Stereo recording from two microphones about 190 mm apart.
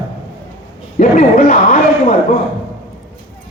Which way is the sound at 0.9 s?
45° left (ahead or behind).